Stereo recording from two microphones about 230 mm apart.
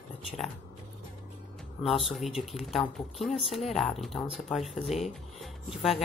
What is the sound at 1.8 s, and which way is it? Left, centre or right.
Speech, centre.